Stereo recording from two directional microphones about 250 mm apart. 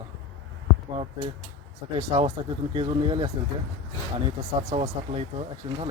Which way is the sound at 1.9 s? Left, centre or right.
Right.